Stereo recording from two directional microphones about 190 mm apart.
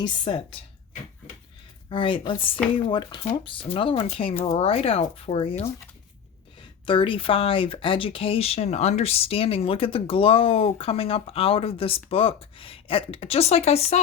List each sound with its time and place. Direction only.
0.3 s speech: 30° left (ahead or behind)
1.9 s speech: 25° left (ahead or behind)